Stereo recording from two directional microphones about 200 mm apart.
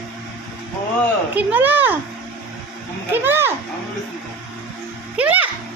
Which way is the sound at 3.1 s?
10° right (ahead or behind).